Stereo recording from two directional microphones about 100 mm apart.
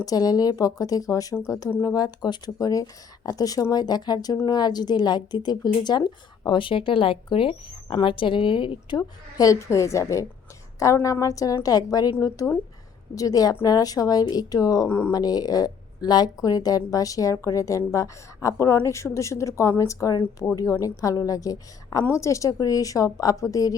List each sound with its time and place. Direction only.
0.0 s speech: 40° left (ahead or behind)
13.1 s speech: 40° left (ahead or behind)
14.8 s speech: 25° left (ahead or behind)
15.1 s speech: 40° left (ahead or behind)